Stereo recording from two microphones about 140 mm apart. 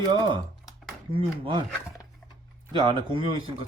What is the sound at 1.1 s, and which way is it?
Speech, 35° right (ahead or behind).